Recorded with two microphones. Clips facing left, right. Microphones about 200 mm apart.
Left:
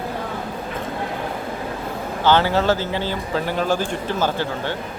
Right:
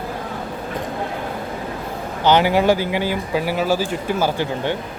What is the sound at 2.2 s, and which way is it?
Speech, 15° right (ahead or behind).